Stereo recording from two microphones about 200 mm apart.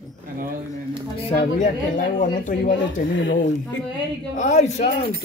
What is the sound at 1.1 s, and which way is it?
Speech, 40° left (ahead or behind).